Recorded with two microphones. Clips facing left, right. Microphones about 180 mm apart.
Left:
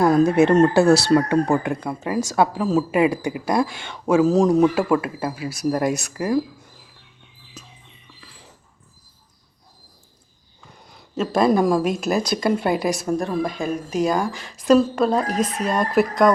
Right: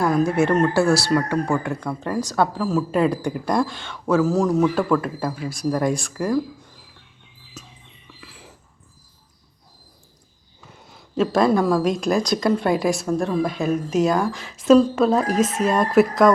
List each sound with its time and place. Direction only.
0.0 s speech: 25° left (ahead or behind)
4.8 s speech: 5° left (ahead or behind)
8.2 s dog: 5° right (ahead or behind)
10.8 s a sound: centre (ahead or behind)
11.4 s speech: 15° left (ahead or behind); by 16.3 s centre (ahead or behind)